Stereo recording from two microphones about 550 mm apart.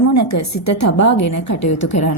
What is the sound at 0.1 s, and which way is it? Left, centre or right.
A woman's voice, left.